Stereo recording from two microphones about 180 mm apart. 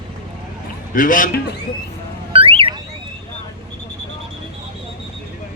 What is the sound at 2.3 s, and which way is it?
Car alarm, 30° right (ahead or behind).